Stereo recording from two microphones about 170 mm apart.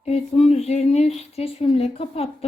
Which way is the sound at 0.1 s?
40° left (ahead or behind).